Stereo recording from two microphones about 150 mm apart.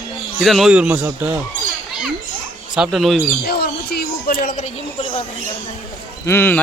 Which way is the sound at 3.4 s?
90° left.